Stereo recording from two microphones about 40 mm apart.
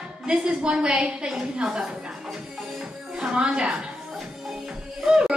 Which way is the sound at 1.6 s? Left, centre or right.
Centre.